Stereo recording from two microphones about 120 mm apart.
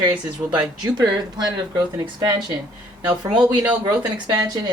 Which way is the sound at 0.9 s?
35° right (ahead or behind).